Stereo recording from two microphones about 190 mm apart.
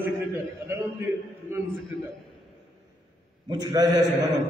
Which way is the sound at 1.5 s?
15° right (ahead or behind).